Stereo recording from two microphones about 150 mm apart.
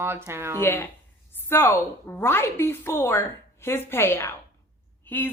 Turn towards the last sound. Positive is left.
turn(degrees=10)  # may be behind; listen again after turning